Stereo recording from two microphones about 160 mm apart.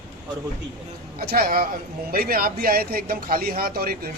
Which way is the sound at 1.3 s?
65° right (ahead or behind).